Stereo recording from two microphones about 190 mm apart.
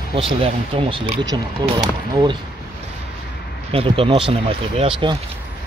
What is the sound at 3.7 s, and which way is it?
Speech, 30° right (ahead or behind).